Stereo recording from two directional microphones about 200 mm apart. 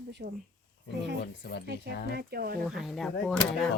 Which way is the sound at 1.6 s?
55° right (ahead or behind).